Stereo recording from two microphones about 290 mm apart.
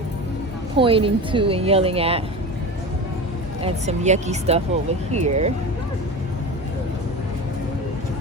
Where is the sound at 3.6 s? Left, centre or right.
Right.